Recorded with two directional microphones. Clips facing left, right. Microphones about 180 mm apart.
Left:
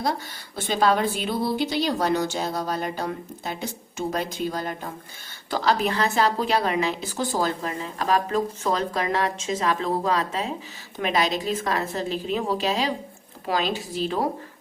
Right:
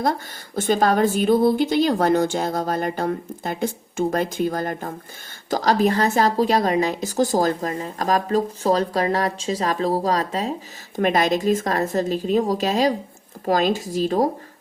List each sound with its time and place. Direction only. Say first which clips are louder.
0.0 s a woman's voice: right 4 dB; 50° right (ahead or behind)
10.9 s a woman's voice: right 5 dB; 50° right (ahead or behind)